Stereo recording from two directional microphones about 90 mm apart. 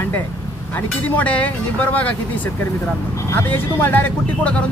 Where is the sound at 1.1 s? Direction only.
15° left (ahead or behind).